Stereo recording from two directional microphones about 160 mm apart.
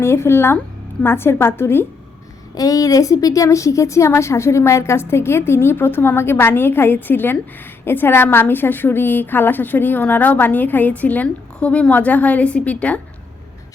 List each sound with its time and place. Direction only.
0.0 s a woman's voice: 15° left (ahead or behind)